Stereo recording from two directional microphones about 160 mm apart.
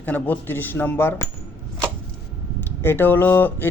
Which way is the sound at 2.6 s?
15° left (ahead or behind).